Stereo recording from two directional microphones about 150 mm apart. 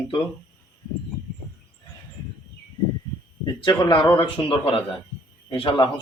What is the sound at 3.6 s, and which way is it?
A man's voice, 30° left (ahead or behind).